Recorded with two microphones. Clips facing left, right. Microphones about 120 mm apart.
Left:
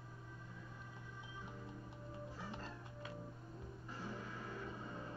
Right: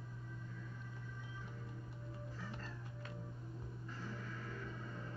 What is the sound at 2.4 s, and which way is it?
Music, 20° left (ahead or behind).